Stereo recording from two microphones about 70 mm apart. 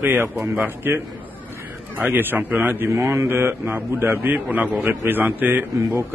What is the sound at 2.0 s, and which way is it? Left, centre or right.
Mantra, right.